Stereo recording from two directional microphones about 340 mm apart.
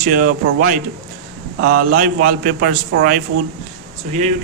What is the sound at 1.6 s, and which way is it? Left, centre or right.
Speech, right.